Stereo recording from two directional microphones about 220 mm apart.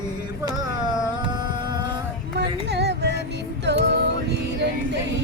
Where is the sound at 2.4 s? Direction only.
50° right (ahead or behind).